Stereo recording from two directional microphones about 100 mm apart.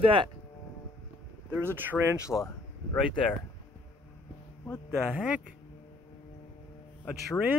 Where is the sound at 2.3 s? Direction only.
15° left (ahead or behind).